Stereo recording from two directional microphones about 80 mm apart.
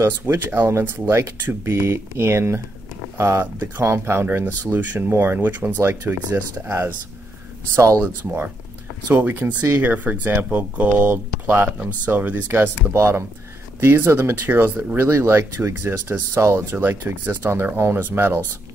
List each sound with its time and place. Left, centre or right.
0.0 s speech: right
7.7 s speech: right
8.0 s speech: right
16.7 s speech: right